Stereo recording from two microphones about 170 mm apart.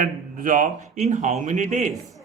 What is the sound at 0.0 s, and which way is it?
Speech, 50° right (ahead or behind).